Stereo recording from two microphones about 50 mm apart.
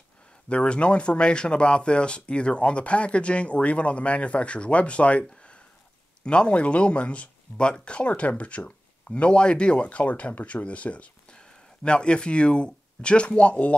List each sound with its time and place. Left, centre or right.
0.5 s speech: left